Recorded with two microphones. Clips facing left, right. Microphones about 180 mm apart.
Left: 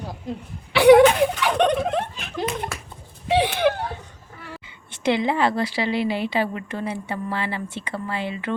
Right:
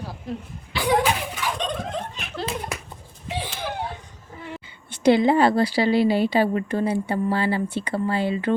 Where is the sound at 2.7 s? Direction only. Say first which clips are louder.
Right 2 dB; 15° right (ahead or behind).